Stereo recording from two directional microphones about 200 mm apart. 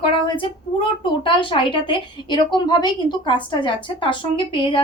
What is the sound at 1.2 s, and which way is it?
A woman's voice, 25° left (ahead or behind).